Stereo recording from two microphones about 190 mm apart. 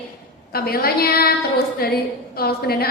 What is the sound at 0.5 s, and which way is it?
A woman's voice, 55° left (ahead or behind).